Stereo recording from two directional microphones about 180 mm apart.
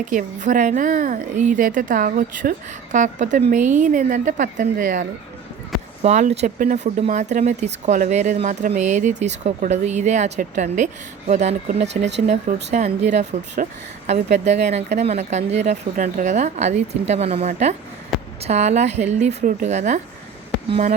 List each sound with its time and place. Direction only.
0.0 s a woman's voice: 45° right (ahead or behind)